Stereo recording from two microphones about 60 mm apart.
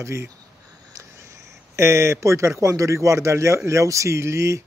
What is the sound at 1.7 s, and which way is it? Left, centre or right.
Speech, right.